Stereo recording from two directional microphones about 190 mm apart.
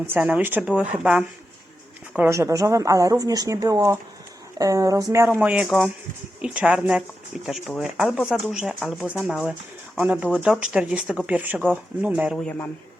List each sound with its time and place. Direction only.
0.1 s speech: 5° right (ahead or behind)
2.1 s speech: 10° right (ahead or behind)